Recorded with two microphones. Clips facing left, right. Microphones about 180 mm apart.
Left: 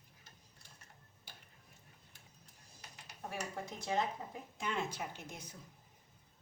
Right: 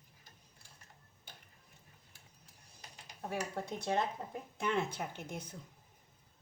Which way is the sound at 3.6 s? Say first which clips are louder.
Even; 60° right (ahead or behind).